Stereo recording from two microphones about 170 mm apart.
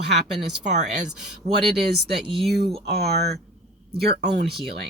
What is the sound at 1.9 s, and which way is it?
Speech, 75° right (ahead or behind).